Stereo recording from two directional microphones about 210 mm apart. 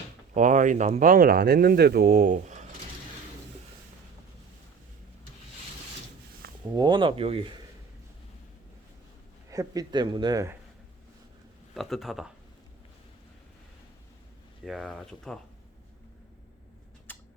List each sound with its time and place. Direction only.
0.3 s speech: 35° right (ahead or behind)
6.7 s speech: 20° right (ahead or behind)
9.5 s speech: 15° right (ahead or behind)
11.7 s speech: centre (ahead or behind)
14.6 s speech: centre (ahead or behind)
17.1 s a sound: 10° left (ahead or behind)